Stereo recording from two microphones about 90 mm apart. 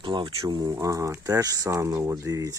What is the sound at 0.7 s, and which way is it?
Speech, 35° right (ahead or behind).